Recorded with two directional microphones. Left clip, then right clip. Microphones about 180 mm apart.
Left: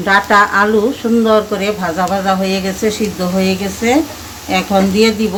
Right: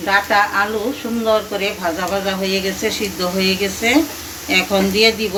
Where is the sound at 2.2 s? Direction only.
60° left (ahead or behind).